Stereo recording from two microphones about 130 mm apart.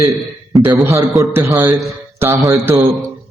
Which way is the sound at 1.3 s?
20° right (ahead or behind).